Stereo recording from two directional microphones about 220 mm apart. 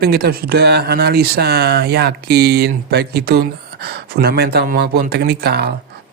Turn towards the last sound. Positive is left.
turn(degrees=-45)  # may be behind; listen again after turning